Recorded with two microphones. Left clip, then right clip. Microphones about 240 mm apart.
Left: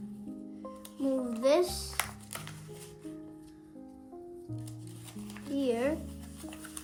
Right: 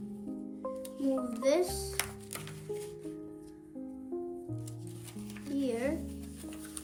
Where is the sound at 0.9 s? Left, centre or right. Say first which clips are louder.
Left 3 dB; centre.